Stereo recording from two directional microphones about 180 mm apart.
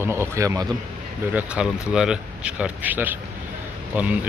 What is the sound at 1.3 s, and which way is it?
Speech, 5° right (ahead or behind).